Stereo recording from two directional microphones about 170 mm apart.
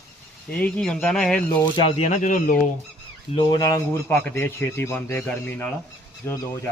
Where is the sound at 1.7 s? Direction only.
35° left (ahead or behind).